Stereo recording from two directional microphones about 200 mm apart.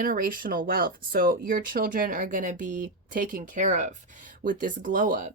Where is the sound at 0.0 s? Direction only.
45° right (ahead or behind).